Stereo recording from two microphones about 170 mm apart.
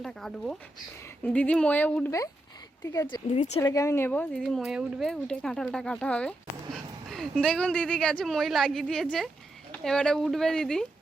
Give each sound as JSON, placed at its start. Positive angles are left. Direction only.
{"t": 0.0, "sound": "speech", "side_deg": 5}
{"t": 3.3, "sound": "speech", "side_deg": 40}
{"t": 3.6, "sound": "speech", "side_deg": 20}
{"t": 4.4, "sound": "speech", "side_deg": 0}